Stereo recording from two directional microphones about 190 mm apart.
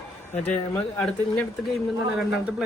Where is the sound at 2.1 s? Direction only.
5° right (ahead or behind).